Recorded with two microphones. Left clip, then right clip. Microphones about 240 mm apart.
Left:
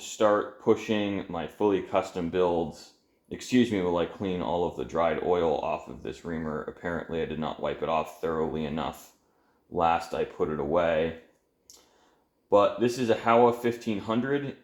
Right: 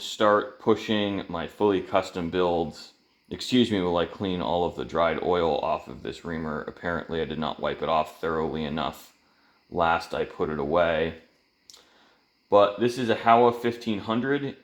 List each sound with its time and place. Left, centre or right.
0.2 s speech: right
12.5 s speech: right